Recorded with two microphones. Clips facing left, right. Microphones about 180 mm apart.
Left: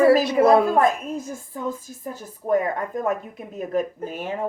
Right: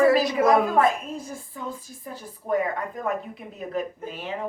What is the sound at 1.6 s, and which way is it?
Speech, 45° left (ahead or behind).